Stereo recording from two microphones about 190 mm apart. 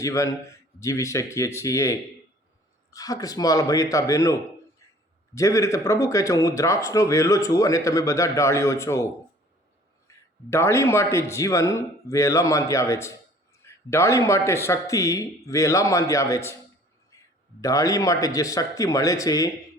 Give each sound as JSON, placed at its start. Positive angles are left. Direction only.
{"t": 0.0, "sound": "speech", "side_deg": 15}
{"t": 10.1, "sound": "a sound", "side_deg": 15}
{"t": 10.5, "sound": "speech", "side_deg": 15}
{"t": 17.6, "sound": "speech", "side_deg": 20}